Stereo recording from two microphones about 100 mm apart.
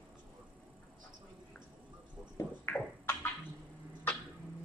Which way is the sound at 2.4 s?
25° left (ahead or behind).